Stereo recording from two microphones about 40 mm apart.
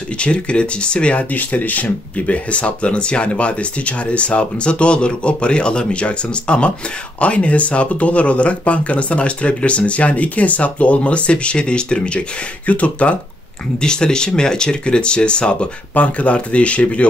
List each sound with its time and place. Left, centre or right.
0.2 s speech: left
1.3 s speech: left
13.7 s speech: centre
15.9 s speech: left